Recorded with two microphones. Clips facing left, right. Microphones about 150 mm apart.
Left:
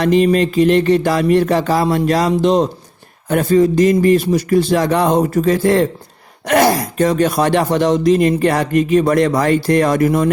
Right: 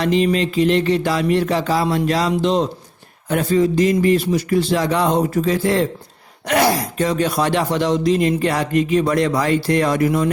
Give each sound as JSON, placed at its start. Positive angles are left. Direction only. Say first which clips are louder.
{"t": 0.0, "sound": "speech", "louder": "left 4 dB", "side_deg": 50}